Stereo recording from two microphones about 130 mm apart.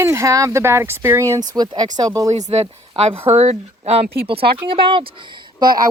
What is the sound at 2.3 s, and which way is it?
Speech, 55° right (ahead or behind).